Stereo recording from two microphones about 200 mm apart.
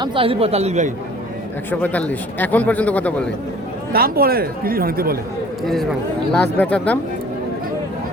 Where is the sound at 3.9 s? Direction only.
50° right (ahead or behind).